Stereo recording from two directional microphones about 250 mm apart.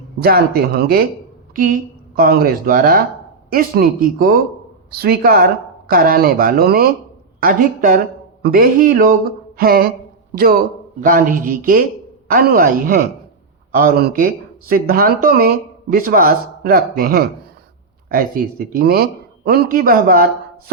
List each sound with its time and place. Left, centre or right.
0.2 s speech: right
18.7 s speech: right